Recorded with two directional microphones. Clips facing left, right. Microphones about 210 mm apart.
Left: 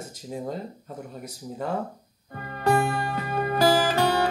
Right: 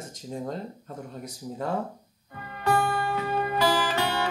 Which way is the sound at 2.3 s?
45° left (ahead or behind).